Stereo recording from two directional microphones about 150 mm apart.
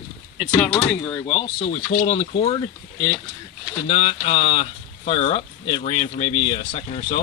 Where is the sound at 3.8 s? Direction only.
45° left (ahead or behind).